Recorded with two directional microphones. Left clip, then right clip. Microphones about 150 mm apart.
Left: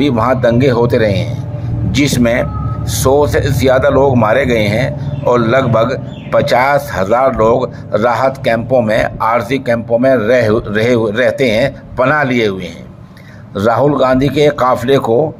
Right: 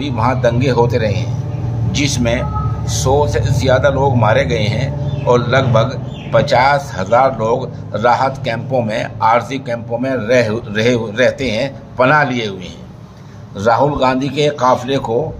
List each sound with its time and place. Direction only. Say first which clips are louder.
0.2 s a man's voice: left 1 dB; 45° left (ahead or behind)
13.6 s a man's voice: left 2 dB; 45° left (ahead or behind)